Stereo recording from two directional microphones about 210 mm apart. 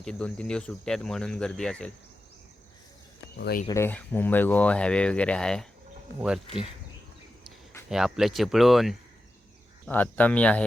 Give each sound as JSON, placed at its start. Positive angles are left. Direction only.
{"t": 0.0, "sound": "cricket", "side_deg": 5}
{"t": 3.3, "sound": "speech", "side_deg": 50}
{"t": 3.7, "sound": "speech", "side_deg": 10}
{"t": 6.1, "sound": "cricket", "side_deg": -5}
{"t": 7.9, "sound": "cricket", "side_deg": 0}
{"t": 9.8, "sound": "speech", "side_deg": 10}